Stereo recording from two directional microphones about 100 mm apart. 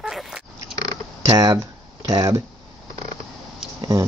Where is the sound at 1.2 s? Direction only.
35° right (ahead or behind).